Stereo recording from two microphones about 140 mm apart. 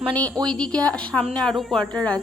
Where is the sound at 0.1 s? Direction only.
10° left (ahead or behind).